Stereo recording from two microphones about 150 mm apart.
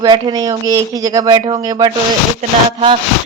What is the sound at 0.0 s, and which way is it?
Speech, 25° right (ahead or behind).